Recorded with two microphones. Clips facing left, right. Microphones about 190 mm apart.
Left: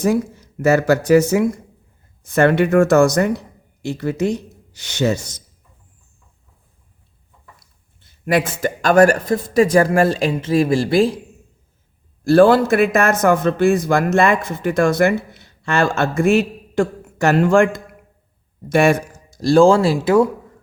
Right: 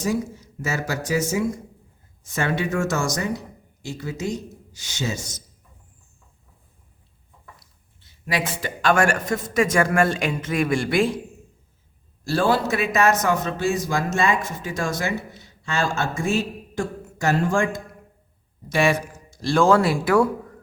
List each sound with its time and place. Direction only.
0.0 s a man's voice: 60° left (ahead or behind)
8.3 s speech: 50° left (ahead or behind); by 11.2 s 35° left (ahead or behind)
12.2 s a man's voice: 55° left (ahead or behind)
18.7 s speech: 50° left (ahead or behind); by 20.2 s 25° left (ahead or behind)